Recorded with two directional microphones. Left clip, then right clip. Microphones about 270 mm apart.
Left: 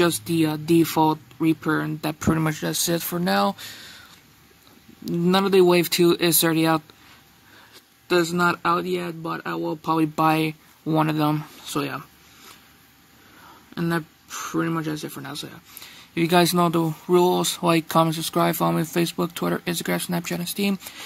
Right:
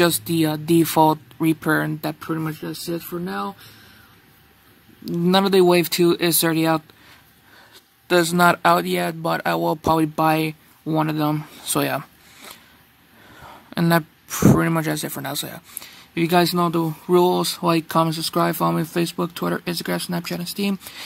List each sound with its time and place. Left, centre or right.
0.0 s speech: centre
2.1 s speech: centre
5.0 s speech: centre
8.1 s speech: centre
11.7 s speech: centre
13.7 s speech: centre